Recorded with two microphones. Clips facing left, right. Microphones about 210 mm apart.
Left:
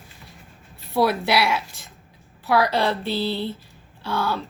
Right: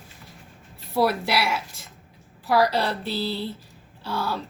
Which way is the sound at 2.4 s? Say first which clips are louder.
Left 1 dB; 70° left (ahead or behind).